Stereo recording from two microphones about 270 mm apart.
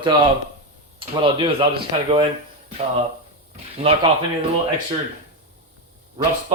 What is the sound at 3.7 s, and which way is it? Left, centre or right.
Speech, right.